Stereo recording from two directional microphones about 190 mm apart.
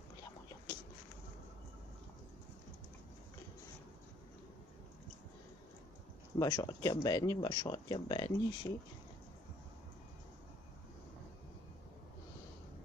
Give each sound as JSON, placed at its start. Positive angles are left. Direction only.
{"t": 6.3, "sound": "speech", "side_deg": 20}